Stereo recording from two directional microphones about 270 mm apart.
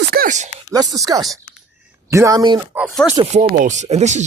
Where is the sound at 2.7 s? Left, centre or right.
Centre.